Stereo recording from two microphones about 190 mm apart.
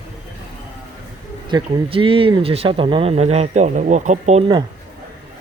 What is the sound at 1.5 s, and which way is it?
Speech, 25° right (ahead or behind).